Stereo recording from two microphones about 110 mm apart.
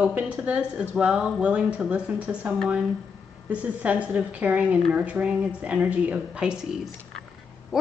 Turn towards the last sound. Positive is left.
turn(degrees=-5)  # may be behind; listen again after turning